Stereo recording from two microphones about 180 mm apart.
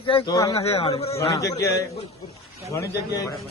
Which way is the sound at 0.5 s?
35° left (ahead or behind).